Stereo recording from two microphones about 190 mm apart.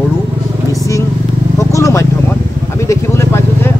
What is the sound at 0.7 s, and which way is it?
Vehicle, 15° left (ahead or behind).